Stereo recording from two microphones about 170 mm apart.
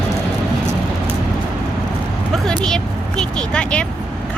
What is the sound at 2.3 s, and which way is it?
Vehicle, 5° left (ahead or behind).